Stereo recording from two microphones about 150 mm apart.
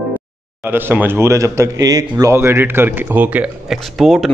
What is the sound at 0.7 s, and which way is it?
A man's voice, 15° right (ahead or behind).